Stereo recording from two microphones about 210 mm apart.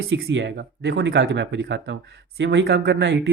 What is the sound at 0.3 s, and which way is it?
Speech, 60° right (ahead or behind).